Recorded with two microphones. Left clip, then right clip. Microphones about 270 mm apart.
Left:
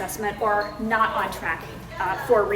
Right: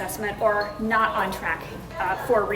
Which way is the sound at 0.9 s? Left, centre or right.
Centre.